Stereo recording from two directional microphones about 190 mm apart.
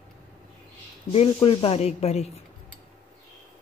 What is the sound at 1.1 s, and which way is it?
Speech, 30° left (ahead or behind).